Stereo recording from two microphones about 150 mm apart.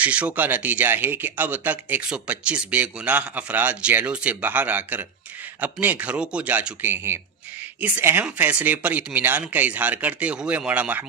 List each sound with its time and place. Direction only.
0.0 s speech: 10° right (ahead or behind)